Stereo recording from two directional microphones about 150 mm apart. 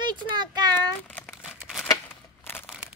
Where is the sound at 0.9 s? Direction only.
10° left (ahead or behind).